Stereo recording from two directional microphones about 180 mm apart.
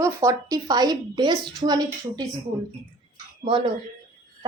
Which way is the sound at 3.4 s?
30° right (ahead or behind).